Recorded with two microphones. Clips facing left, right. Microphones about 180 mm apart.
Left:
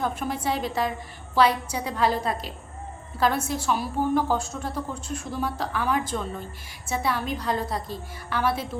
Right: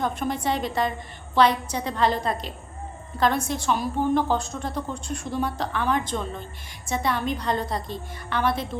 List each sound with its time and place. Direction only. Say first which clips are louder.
0.0 s a woman's voice: right 1 dB; 5° left (ahead or behind)